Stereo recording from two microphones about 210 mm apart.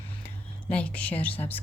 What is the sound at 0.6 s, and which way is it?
Speech, 5° left (ahead or behind).